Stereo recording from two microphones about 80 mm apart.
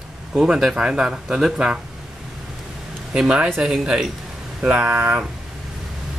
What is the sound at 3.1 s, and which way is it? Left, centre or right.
A man's voice, centre.